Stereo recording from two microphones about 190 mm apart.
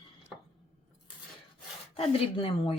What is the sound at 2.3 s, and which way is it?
Speech, 30° left (ahead or behind).